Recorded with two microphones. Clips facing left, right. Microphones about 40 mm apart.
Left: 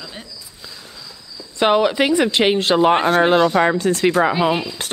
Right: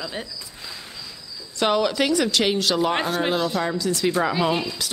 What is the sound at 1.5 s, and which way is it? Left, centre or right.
Speech, left.